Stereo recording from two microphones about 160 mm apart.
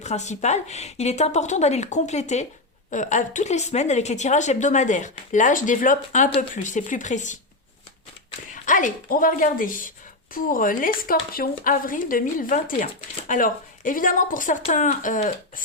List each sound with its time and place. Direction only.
0.0 s a woman's voice: 45° left (ahead or behind)
8.6 s a woman's voice: 55° left (ahead or behind)